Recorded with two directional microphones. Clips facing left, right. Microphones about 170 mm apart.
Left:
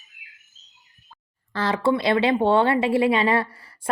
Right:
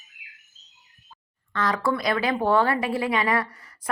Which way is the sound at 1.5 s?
30° left (ahead or behind).